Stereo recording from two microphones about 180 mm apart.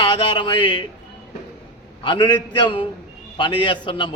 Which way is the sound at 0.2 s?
25° left (ahead or behind).